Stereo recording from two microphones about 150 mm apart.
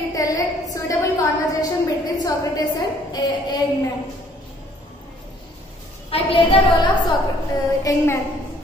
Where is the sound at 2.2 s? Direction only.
25° left (ahead or behind).